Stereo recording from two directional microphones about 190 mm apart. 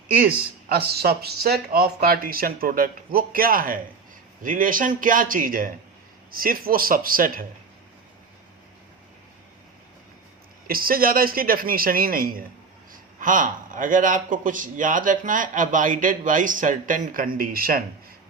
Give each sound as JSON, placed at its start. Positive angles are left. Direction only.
{"t": 0.2, "sound": "a man's voice", "side_deg": -55}
{"t": 10.7, "sound": "a man's voice", "side_deg": -50}